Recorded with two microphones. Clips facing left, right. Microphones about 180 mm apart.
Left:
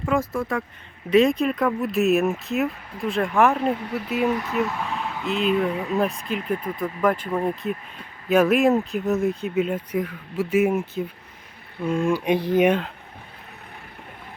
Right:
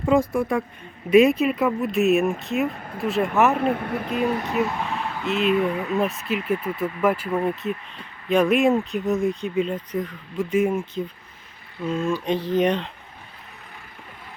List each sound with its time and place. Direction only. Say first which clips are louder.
0.0 s speech: right 4 dB; 15° right (ahead or behind)
3.6 s speech: right 1 dB; 55° right (ahead or behind)
4.5 s speech: right 1 dB; centre (ahead or behind)